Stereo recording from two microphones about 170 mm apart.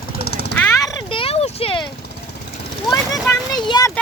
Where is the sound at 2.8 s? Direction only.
20° left (ahead or behind).